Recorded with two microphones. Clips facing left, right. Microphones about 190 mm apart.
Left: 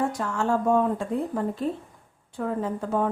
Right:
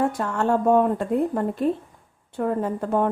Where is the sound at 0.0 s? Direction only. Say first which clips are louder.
Right 3 dB; 55° right (ahead or behind).